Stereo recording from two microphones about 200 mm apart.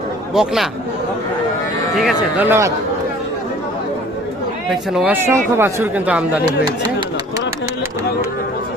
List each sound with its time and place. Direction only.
0.3 s speech: centre (ahead or behind)
1.9 s speech: centre (ahead or behind)
2.5 s speech: 15° right (ahead or behind)
4.7 s speech: 5° right (ahead or behind)